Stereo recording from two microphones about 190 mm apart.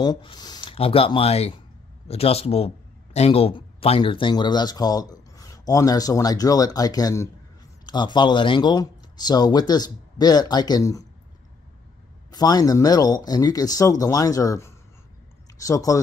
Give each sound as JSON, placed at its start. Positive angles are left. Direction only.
{"t": 0.0, "sound": "a man's voice", "side_deg": 25}
{"t": 12.3, "sound": "speech", "side_deg": 20}